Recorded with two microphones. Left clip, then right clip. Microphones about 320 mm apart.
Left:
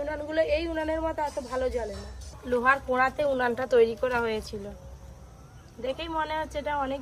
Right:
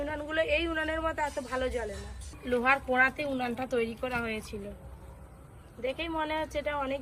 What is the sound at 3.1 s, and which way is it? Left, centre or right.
A woman's voice, centre.